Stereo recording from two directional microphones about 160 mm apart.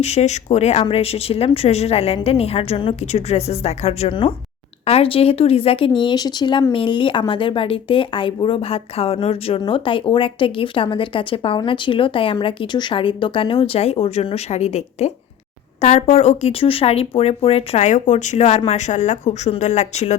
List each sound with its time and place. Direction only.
0.0 s speech: 40° left (ahead or behind)